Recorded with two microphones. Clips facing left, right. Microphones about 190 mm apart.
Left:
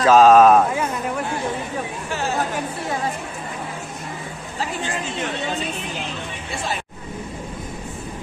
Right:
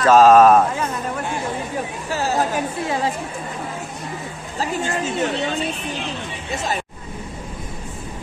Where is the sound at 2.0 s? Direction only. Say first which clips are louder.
Right 3 dB; 40° right (ahead or behind).